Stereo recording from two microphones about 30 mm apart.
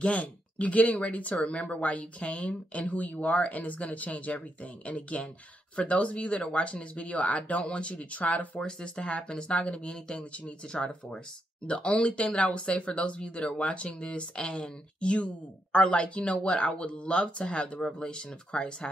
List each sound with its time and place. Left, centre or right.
0.1 s speech: left
1.3 s speech: left
8.6 s speech: left
9.9 s speech: left
11.6 s speech: left
12.5 s speech: left